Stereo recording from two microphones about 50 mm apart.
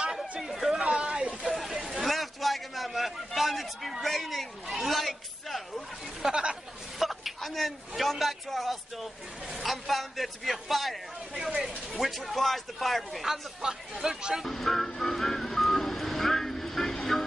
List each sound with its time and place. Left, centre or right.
0.4 s chatter: centre
1.5 s a sound: centre
6.2 s speech: centre
7.0 s a man's voice: centre
14.4 s speech: centre
14.9 s vehicle: centre